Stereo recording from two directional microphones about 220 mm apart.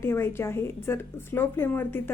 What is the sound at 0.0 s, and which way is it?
Speech, 10° left (ahead or behind).